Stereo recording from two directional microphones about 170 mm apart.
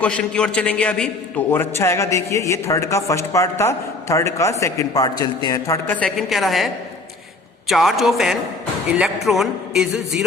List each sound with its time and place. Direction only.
0.0 s a man's voice: 5° left (ahead or behind)
6.0 s music: centre (ahead or behind)
7.7 s music: centre (ahead or behind)